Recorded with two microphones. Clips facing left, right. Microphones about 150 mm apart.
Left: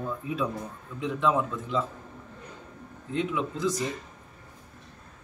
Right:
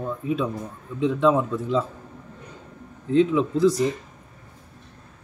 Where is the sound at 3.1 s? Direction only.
30° right (ahead or behind).